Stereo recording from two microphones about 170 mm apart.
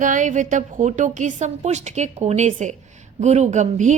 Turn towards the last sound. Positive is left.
turn(degrees=-45)  # may be behind; listen again after turning